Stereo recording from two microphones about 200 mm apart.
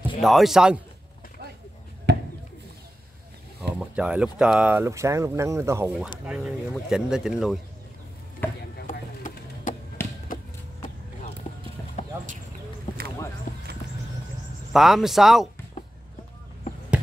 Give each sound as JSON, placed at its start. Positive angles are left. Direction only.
{"t": 0.2, "sound": "speech", "side_deg": 0}
{"t": 2.1, "sound": "a sound", "side_deg": -55}
{"t": 3.8, "sound": "speech", "side_deg": -5}
{"t": 6.2, "sound": "speech", "side_deg": -5}
{"t": 8.4, "sound": "a sound", "side_deg": 10}
{"t": 8.9, "sound": "music", "side_deg": 40}
{"t": 10.0, "sound": "a sound", "side_deg": 10}
{"t": 13.5, "sound": "basketball bounce", "side_deg": 40}
{"t": 14.7, "sound": "speech", "side_deg": 0}